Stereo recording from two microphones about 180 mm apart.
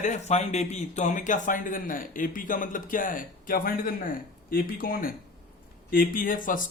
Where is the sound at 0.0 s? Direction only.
40° left (ahead or behind).